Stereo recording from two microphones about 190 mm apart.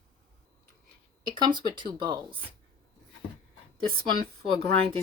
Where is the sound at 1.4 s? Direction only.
25° right (ahead or behind).